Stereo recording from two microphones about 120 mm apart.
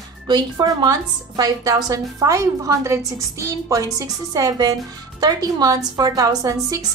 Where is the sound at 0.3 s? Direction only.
35° right (ahead or behind).